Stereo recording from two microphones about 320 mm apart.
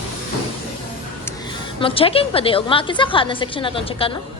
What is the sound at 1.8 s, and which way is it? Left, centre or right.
A woman's voice, centre.